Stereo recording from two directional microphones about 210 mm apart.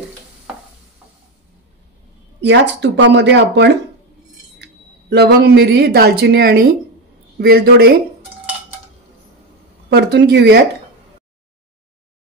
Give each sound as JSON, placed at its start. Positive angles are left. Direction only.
{"t": 2.4, "sound": "speech", "side_deg": -55}
{"t": 5.1, "sound": "speech", "side_deg": -50}
{"t": 9.8, "sound": "speech", "side_deg": -55}